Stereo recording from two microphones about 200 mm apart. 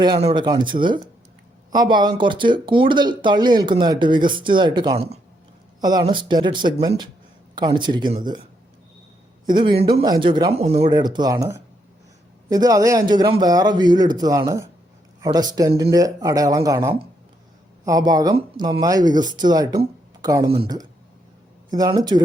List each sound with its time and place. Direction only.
0.2 s speech: 30° right (ahead or behind)
9.5 s speech: 25° right (ahead or behind)
10.9 s speech: 20° right (ahead or behind)